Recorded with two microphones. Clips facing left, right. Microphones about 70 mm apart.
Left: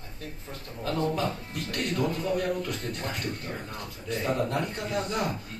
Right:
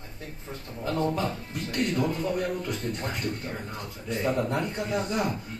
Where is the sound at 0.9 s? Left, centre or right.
Right.